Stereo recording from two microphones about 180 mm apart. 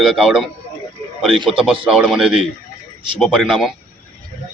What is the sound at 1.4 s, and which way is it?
Speech, 30° right (ahead or behind).